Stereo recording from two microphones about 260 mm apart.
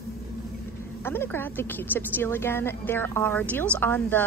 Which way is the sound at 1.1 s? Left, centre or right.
Centre.